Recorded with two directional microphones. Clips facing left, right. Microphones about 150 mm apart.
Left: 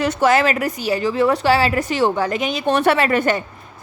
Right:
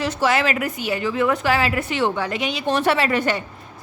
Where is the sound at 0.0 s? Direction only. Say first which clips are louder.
Left 4 dB; 55° left (ahead or behind).